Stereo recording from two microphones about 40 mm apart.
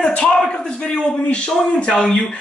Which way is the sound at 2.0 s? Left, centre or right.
Centre.